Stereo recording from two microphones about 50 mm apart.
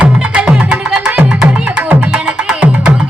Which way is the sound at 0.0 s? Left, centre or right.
Right.